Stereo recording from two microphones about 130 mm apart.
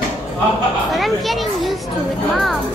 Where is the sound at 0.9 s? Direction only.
Centre (ahead or behind).